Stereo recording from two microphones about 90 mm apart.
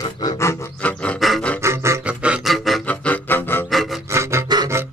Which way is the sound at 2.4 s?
Centre (ahead or behind).